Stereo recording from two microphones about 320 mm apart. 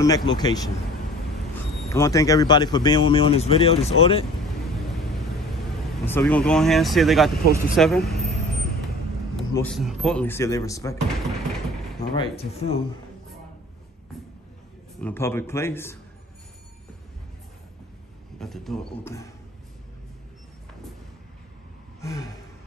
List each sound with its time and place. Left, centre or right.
0.0 s speech: centre
1.9 s speech: centre
6.0 s speech: centre
9.4 s speech: centre
12.0 s speech: centre
15.0 s speech: centre
18.4 s speech: centre
22.0 s a sound: centre